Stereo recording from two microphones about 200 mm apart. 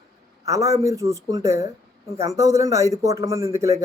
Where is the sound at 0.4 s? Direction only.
15° right (ahead or behind).